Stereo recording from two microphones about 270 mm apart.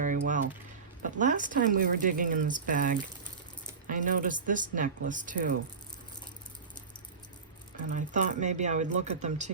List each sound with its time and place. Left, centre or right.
0.0 s typing: right
1.2 s speech: right
7.9 s speech: right